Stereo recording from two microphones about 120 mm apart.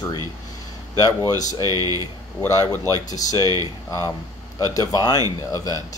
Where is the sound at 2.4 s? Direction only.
25° left (ahead or behind).